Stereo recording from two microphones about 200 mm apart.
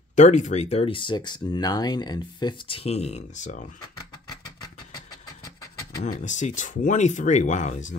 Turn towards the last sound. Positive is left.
turn(degrees=35)  # may be behind; listen again after turning